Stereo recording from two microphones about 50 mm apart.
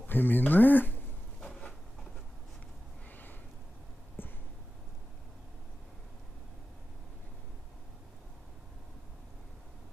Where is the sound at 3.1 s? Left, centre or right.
Left.